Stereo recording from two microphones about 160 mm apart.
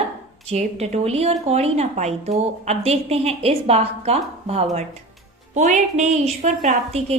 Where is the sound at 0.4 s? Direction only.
40° right (ahead or behind).